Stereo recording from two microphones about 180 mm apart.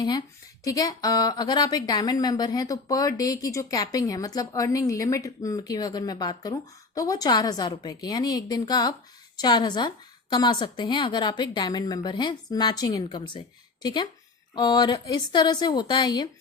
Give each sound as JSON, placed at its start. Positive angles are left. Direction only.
{"t": 0.0, "sound": "speech", "side_deg": 20}